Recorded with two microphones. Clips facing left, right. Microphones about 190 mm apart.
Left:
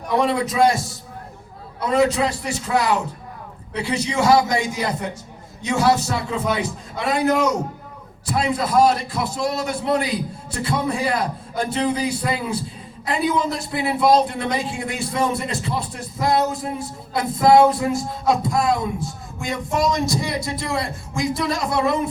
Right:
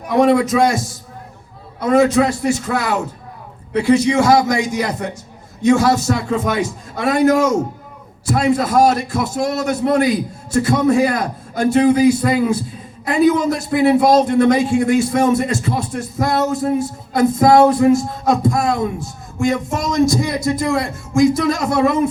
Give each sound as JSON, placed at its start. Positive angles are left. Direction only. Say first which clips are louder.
{"t": 0.2, "sound": "a man's voice", "louder": "right 6 dB", "side_deg": -45}
{"t": 1.8, "sound": "a man's voice", "louder": "right 5 dB", "side_deg": -45}
{"t": 5.6, "sound": "a man's voice", "louder": "right 6 dB", "side_deg": -45}